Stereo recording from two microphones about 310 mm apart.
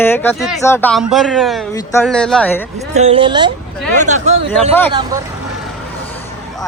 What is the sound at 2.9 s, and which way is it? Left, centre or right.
A woman's voice, centre.